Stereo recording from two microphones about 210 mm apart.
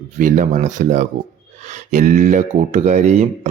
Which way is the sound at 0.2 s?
35° right (ahead or behind).